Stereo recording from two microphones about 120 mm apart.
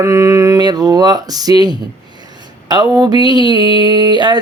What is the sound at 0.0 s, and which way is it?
Speech, 25° right (ahead or behind).